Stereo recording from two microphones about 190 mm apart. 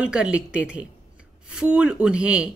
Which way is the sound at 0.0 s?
5° right (ahead or behind).